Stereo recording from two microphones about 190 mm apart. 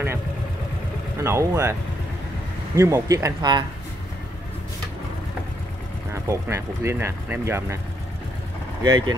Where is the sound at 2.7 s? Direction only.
15° right (ahead or behind).